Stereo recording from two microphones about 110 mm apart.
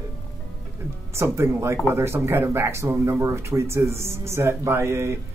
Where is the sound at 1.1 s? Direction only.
25° right (ahead or behind).